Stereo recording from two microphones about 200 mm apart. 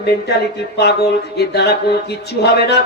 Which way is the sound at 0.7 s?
55° left (ahead or behind).